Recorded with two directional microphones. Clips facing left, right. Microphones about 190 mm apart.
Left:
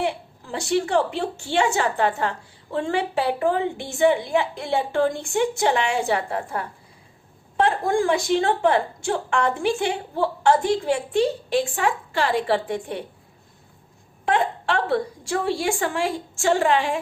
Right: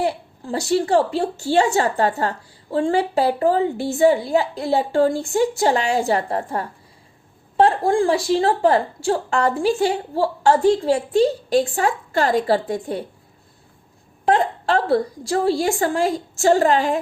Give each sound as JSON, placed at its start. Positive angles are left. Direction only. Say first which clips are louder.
{"t": 0.0, "sound": "a woman's voice", "louder": "right 3 dB", "side_deg": -40}
{"t": 14.3, "sound": "a woman's voice", "louder": "right 4 dB", "side_deg": -35}